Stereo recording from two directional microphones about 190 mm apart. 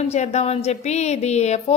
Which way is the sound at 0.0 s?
35° left (ahead or behind).